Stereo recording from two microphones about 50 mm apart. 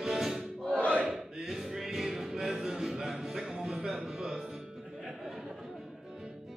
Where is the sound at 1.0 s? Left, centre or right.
Centre.